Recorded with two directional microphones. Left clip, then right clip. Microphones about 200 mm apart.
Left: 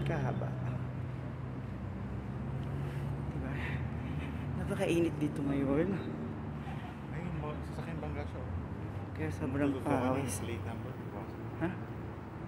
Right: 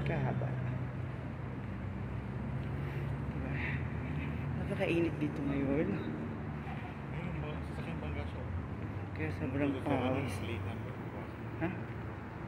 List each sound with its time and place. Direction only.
4.7 s speech: 15° left (ahead or behind)
9.2 s speech: 10° left (ahead or behind)